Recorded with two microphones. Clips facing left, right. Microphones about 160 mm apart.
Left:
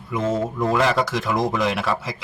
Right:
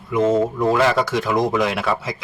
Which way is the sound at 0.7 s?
Centre (ahead or behind).